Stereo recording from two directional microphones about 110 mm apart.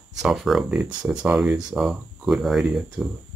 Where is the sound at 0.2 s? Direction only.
Centre (ahead or behind).